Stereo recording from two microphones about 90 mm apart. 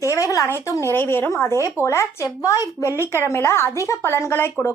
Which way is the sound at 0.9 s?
25° left (ahead or behind).